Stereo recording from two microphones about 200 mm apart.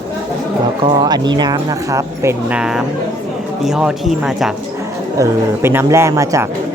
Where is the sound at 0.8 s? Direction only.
20° right (ahead or behind); by 4.5 s centre (ahead or behind).